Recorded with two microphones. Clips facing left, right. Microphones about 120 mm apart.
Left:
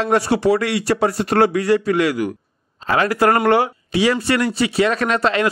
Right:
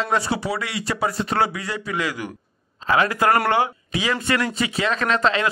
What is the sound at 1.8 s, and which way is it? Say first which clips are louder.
Speech: left 9 dB; 60° left (ahead or behind).